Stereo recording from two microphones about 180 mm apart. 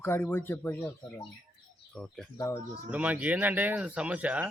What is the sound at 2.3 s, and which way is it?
Speech, 15° left (ahead or behind).